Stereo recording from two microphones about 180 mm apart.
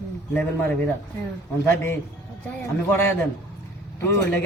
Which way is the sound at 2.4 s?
10° left (ahead or behind).